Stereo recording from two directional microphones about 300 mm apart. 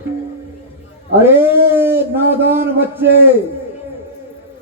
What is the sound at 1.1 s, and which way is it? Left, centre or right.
A man's voice, centre.